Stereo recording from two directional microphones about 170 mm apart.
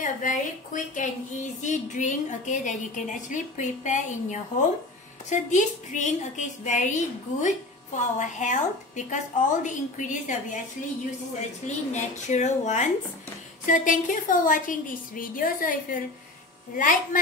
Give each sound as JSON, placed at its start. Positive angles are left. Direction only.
{"t": 0.0, "sound": "a woman's voice", "side_deg": 50}
{"t": 11.6, "sound": "a woman's voice", "side_deg": 45}